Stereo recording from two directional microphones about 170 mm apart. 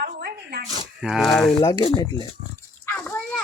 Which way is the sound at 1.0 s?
Centre (ahead or behind).